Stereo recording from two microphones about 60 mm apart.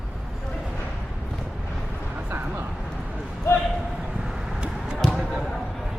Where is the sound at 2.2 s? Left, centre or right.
Right.